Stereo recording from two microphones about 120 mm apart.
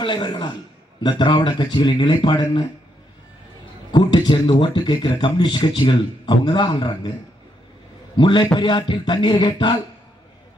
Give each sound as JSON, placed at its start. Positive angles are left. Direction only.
{"t": 0.0, "sound": "speech", "side_deg": 40}
{"t": 3.9, "sound": "speech", "side_deg": 40}
{"t": 8.2, "sound": "a man's voice", "side_deg": 40}